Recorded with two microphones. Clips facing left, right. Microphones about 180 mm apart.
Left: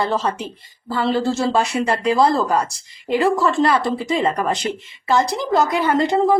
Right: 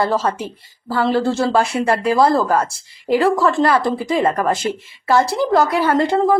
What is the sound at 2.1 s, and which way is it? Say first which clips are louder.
Speech: right 1 dB; centre (ahead or behind).